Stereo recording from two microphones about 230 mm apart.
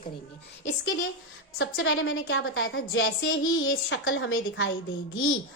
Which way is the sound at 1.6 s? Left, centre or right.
Left.